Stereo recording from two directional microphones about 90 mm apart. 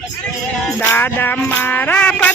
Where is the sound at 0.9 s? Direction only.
20° left (ahead or behind).